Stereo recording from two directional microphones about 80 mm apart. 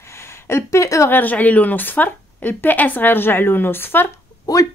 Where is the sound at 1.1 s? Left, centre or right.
Left.